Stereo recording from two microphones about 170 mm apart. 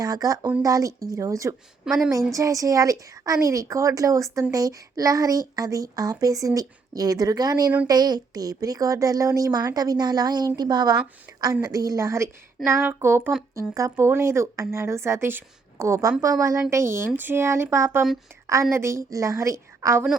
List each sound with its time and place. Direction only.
0.0 s a child's voice: 20° right (ahead or behind)
1.8 s a woman's voice: centre (ahead or behind)
2.0 s a child's voice: 20° right (ahead or behind)
11.3 s a sound: 15° right (ahead or behind)
11.6 s a child's voice: 20° right (ahead or behind)